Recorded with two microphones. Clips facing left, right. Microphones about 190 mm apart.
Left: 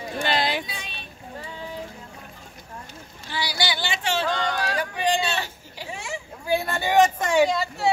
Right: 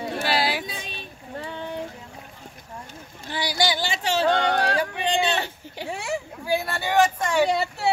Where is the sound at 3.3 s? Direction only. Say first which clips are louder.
Right 3 dB; 50° right (ahead or behind).